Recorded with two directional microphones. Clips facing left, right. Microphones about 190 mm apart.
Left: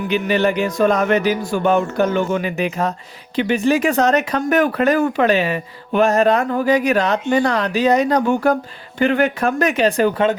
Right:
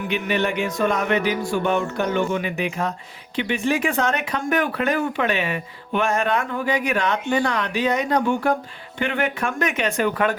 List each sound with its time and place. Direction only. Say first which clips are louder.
0.1 s speech: left 6 dB; 35° left (ahead or behind)